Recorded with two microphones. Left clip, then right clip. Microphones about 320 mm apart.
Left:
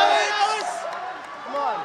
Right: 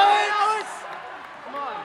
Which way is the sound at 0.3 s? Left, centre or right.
Right.